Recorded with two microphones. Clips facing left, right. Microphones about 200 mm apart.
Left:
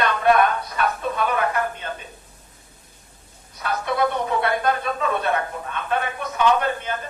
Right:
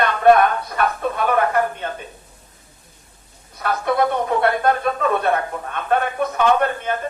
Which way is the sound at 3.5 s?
55° right (ahead or behind).